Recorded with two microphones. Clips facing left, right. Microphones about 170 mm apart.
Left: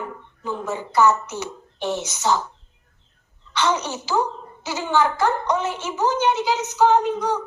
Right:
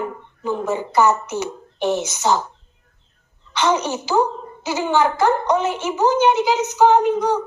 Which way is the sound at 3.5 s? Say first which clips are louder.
Right 3 dB; 15° right (ahead or behind).